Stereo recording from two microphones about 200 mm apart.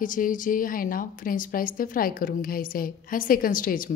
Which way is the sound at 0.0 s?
40° left (ahead or behind).